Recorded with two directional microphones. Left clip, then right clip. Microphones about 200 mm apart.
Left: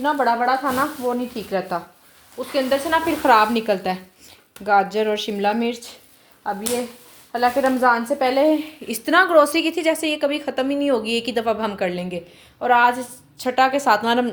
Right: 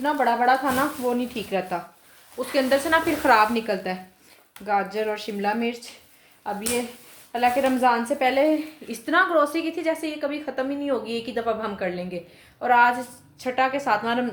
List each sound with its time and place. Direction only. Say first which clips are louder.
0.0 s speech: left 3 dB; 20° left (ahead or behind)
0.3 s speech: left 1 dB; 5° left (ahead or behind)
1.4 s speech: left 3 dB; 20° left (ahead or behind)
2.4 s speech: left 1 dB; centre (ahead or behind)
3.2 s a woman's voice: left 4 dB; 25° left (ahead or behind)
7.3 s a woman's voice: left 3 dB; 20° left (ahead or behind); by 12.2 s 45° left (ahead or behind)
12.5 s a woman's voice: left 2 dB; 30° left (ahead or behind)